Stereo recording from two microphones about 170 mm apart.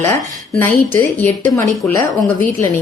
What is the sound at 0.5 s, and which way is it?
Speech, 10° left (ahead or behind).